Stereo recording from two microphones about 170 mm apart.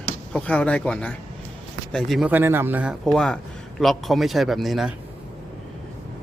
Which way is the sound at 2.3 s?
10° right (ahead or behind).